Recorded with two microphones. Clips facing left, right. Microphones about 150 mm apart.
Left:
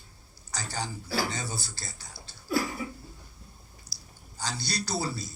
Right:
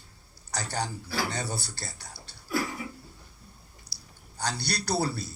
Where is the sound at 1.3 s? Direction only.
65° right (ahead or behind).